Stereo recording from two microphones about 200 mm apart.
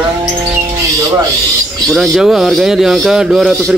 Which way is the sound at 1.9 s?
Centre (ahead or behind).